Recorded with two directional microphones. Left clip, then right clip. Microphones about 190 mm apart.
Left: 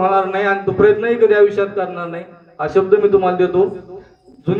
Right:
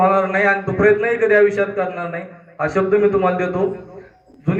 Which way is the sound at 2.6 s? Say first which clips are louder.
Left 3 dB; 15° right (ahead or behind).